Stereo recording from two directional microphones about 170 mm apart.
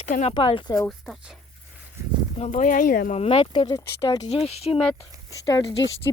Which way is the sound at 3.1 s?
35° left (ahead or behind).